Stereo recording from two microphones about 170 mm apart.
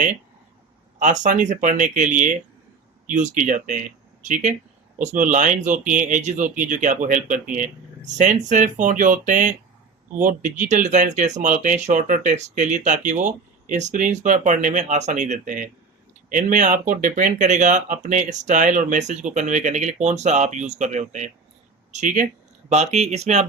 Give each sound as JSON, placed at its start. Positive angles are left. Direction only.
{"t": 0.9, "sound": "speech", "side_deg": -45}